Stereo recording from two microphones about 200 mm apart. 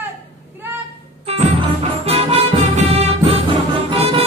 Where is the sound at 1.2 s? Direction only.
30° right (ahead or behind).